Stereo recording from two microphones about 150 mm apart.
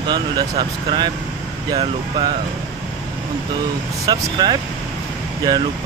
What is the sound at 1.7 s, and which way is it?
Speech, 25° right (ahead or behind).